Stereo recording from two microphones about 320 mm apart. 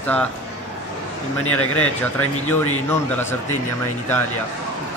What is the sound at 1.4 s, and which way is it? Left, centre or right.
Speech, left.